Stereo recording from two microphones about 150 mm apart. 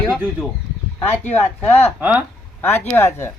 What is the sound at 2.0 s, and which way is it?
Speech, 10° right (ahead or behind).